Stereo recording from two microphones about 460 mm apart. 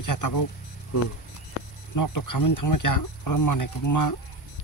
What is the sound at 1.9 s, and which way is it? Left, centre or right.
Speech, left.